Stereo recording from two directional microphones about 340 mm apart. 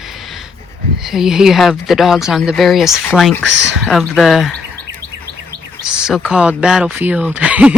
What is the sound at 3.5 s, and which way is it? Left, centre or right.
Speech, right.